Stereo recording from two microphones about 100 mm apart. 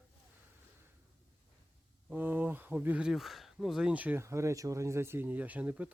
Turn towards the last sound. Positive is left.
turn(degrees=-15)  # may be behind; listen again after turning